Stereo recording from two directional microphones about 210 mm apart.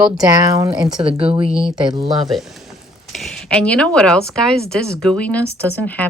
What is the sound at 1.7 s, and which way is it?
Speech, 20° right (ahead or behind).